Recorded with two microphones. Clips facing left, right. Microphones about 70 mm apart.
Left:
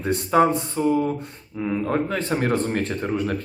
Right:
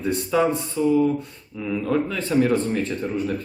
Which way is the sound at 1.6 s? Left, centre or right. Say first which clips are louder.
Even; left.